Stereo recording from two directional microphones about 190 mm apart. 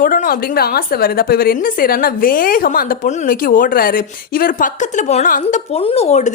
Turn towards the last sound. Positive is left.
turn(degrees=35)  # may be behind; listen again after turning